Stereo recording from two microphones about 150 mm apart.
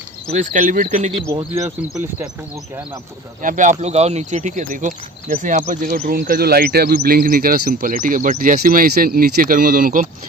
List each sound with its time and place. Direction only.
0.3 s speech: 55° right (ahead or behind)
3.4 s speech: 55° right (ahead or behind)
6.1 s speech: 75° right (ahead or behind)